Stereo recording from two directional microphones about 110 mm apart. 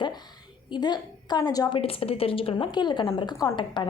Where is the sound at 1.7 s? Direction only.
60° left (ahead or behind).